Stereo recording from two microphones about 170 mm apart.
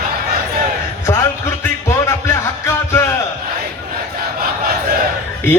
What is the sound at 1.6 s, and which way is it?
Music, 15° left (ahead or behind).